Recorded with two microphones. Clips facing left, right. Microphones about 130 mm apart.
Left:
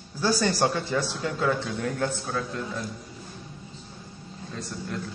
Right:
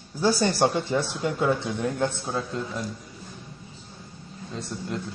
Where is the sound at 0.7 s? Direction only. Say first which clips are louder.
Right 2 dB; 20° right (ahead or behind).